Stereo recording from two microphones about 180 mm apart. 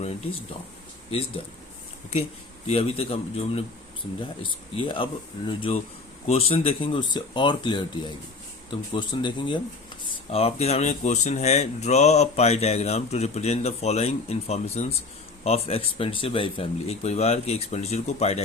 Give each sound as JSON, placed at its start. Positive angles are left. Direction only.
{"t": 2.6, "sound": "speech", "side_deg": 35}
{"t": 4.8, "sound": "speech", "side_deg": 30}